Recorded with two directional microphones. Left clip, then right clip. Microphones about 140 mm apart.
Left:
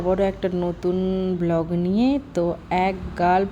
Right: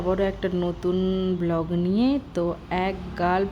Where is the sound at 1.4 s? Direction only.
10° left (ahead or behind).